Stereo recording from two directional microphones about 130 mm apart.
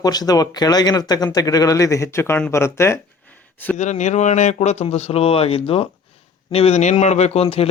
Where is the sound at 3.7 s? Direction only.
65° left (ahead or behind); by 7.7 s 50° left (ahead or behind).